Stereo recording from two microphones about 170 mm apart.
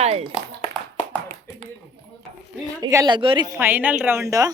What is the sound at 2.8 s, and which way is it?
Speech, 20° right (ahead or behind).